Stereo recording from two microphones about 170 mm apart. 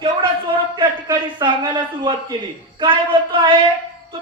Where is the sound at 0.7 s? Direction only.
25° right (ahead or behind).